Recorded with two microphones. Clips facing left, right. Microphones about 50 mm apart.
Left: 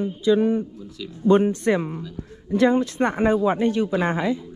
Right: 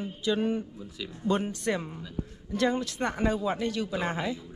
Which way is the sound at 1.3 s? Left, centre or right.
Left.